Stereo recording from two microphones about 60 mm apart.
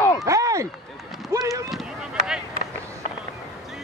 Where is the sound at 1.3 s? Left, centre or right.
Right.